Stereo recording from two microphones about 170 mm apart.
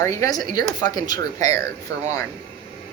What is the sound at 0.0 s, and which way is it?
Mantra, 20° left (ahead or behind).